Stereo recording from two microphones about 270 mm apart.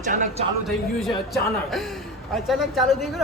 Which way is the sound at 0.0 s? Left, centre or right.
Right.